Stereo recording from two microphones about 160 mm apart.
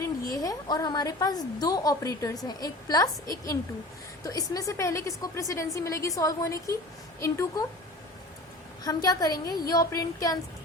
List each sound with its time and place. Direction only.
0.0 s a woman's voice: 20° left (ahead or behind)
4.2 s a woman's voice: 20° left (ahead or behind)
8.8 s a woman's voice: 25° left (ahead or behind)